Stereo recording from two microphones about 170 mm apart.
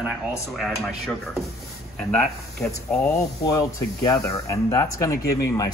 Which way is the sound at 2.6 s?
5° left (ahead or behind).